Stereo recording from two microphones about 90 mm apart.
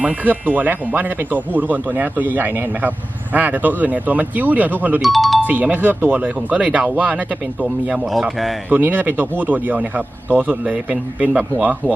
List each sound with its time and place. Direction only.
0.0 s speech: 20° right (ahead or behind)
5.0 s speech: centre (ahead or behind)
5.4 s speech: 20° right (ahead or behind)